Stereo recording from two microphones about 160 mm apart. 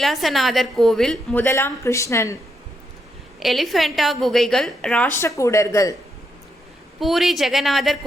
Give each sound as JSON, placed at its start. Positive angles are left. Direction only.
{"t": 0.0, "sound": "a woman's voice", "side_deg": 0}
{"t": 3.4, "sound": "a woman's voice", "side_deg": 0}
{"t": 5.4, "sound": "speech", "side_deg": 20}
{"t": 7.0, "sound": "a woman's voice", "side_deg": 0}